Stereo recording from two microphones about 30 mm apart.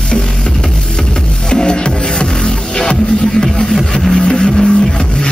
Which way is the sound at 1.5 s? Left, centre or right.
Left.